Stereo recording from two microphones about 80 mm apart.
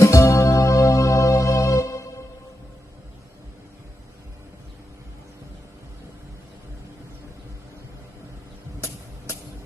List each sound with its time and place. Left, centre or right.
0.0 s music: left